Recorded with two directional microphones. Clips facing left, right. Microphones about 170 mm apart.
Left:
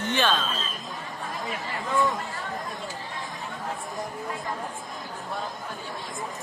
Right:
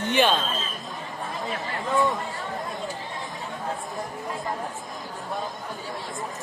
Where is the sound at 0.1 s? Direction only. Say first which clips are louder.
Right 4 dB; 15° right (ahead or behind).